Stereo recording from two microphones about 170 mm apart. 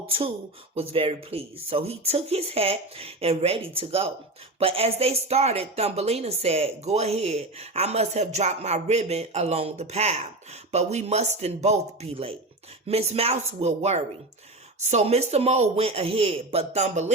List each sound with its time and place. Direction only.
0.8 s speech: 35° right (ahead or behind)